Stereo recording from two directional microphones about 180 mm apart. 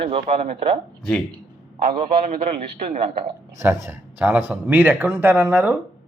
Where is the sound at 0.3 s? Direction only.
35° right (ahead or behind).